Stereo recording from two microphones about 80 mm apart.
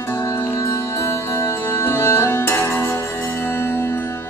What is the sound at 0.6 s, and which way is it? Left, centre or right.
Music, left.